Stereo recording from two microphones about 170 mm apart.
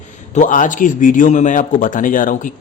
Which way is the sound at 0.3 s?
50° left (ahead or behind).